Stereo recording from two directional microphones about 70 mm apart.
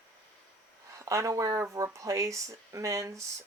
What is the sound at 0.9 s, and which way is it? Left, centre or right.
Speech, right.